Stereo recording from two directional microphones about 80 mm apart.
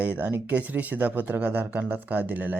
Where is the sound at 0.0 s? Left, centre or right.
Right.